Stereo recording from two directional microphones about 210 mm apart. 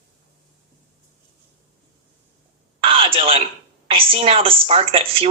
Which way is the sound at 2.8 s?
25° right (ahead or behind).